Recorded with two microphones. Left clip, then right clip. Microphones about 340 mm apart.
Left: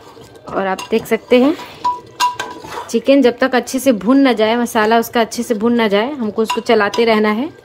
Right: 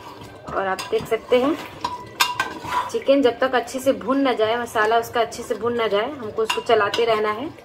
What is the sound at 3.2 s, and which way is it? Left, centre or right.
A woman's voice, left.